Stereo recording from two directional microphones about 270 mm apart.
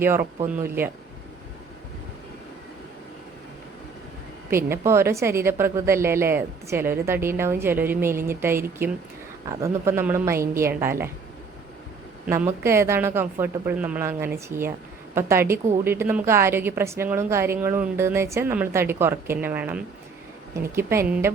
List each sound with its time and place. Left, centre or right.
0.0 s a woman's voice: centre
4.5 s a woman's voice: centre
12.2 s a woman's voice: centre